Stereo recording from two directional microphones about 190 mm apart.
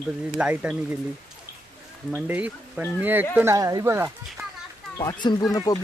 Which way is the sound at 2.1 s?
10° right (ahead or behind).